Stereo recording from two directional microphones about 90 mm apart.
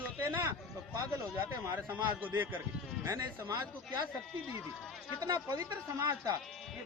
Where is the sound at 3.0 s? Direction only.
35° right (ahead or behind).